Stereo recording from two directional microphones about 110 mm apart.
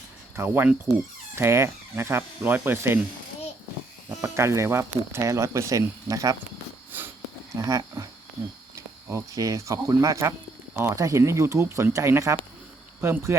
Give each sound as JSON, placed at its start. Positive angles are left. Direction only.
{"t": 0.3, "sound": "speech", "side_deg": -20}
{"t": 4.2, "sound": "speech", "side_deg": -25}
{"t": 6.9, "sound": "a sound", "side_deg": -20}
{"t": 7.6, "sound": "speech", "side_deg": -30}